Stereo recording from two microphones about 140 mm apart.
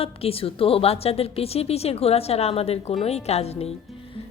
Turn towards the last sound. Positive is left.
turn(degrees=50)  # may be behind; listen again after turning